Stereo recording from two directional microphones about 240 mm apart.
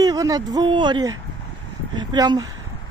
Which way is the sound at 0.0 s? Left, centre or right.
Centre.